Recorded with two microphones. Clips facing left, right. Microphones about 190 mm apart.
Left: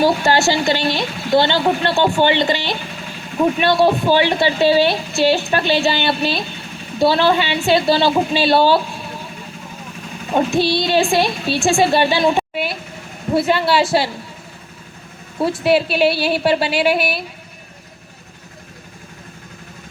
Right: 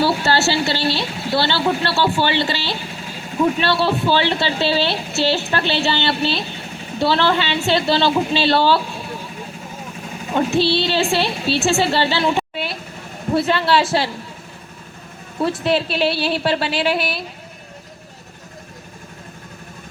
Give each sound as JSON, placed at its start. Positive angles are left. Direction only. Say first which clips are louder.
{"t": 0.0, "sound": "speech", "louder": "left 3 dB", "side_deg": 15}
{"t": 10.3, "sound": "speech", "louder": "left 1 dB", "side_deg": 15}
{"t": 15.4, "sound": "speech", "louder": "left 3 dB", "side_deg": 10}